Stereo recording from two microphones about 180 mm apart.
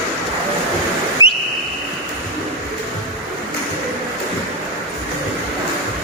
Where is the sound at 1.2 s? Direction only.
25° left (ahead or behind).